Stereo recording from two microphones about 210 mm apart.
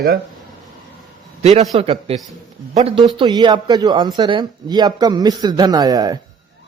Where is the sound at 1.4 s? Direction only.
30° right (ahead or behind).